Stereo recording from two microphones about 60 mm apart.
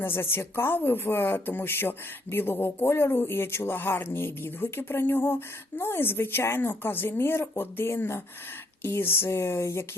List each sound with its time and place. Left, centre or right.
0.0 s speech: left